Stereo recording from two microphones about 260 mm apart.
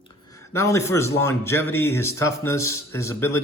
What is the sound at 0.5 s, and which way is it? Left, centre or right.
Speech, centre.